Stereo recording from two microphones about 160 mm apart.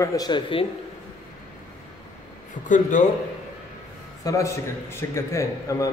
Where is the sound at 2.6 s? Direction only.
55° left (ahead or behind).